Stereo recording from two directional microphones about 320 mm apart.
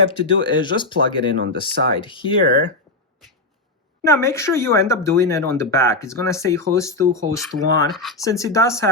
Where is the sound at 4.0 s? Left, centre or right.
Centre.